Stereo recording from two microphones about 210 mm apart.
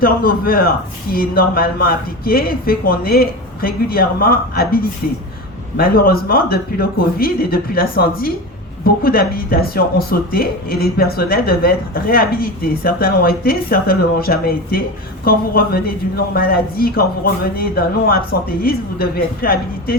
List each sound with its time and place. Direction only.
0.0 s speech: 45° left (ahead or behind)